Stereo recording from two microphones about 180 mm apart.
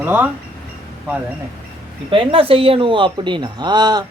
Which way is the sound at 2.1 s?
30° right (ahead or behind).